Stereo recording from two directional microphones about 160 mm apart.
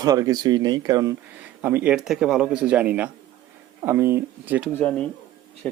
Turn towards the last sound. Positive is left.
turn(degrees=5)  # may be behind; listen again after turning